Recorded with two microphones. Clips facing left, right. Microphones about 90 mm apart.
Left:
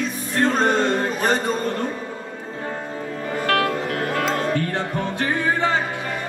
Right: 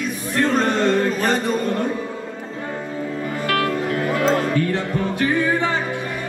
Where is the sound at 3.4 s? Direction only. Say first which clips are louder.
Even; 45° left (ahead or behind).